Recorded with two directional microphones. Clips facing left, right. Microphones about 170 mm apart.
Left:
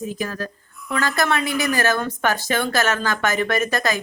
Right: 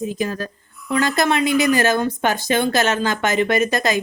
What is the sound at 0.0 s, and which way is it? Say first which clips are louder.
A woman's voice: right 3 dB; 20° right (ahead or behind).